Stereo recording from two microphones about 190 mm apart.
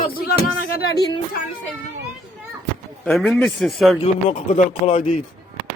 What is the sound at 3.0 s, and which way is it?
Speech, centre (ahead or behind).